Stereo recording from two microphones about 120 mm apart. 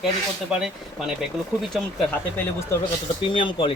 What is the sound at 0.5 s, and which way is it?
Speech, 5° right (ahead or behind).